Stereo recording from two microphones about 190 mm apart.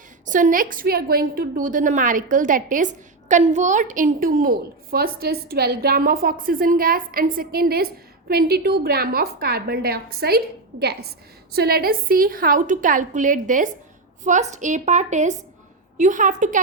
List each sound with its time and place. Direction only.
0.3 s a woman's voice: 45° right (ahead or behind)